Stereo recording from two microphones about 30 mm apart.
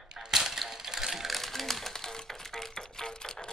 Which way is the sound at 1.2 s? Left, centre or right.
Centre.